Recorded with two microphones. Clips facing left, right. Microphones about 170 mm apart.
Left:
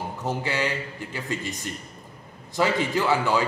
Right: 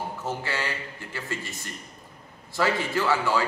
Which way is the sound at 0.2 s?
15° left (ahead or behind).